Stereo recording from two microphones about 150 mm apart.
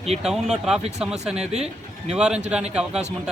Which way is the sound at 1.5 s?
45° right (ahead or behind).